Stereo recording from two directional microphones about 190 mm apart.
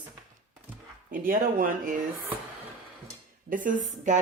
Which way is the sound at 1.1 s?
45° right (ahead or behind).